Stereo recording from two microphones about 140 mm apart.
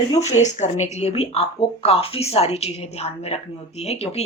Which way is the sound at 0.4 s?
55° left (ahead or behind).